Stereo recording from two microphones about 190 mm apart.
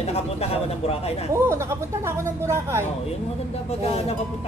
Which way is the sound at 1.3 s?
15° right (ahead or behind).